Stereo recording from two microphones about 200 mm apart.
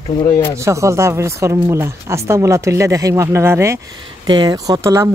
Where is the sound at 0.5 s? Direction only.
15° right (ahead or behind).